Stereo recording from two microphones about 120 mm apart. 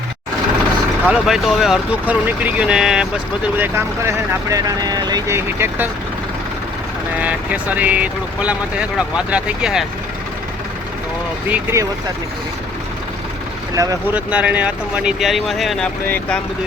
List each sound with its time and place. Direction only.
1.0 s speech: 5° right (ahead or behind)
3.6 s speech: 20° right (ahead or behind)
5.3 s speech: 15° right (ahead or behind)
7.2 s speech: 10° right (ahead or behind)
11.4 s speech: 15° right (ahead or behind)
14.1 s speech: 10° right (ahead or behind)
16.0 s speech: 15° left (ahead or behind)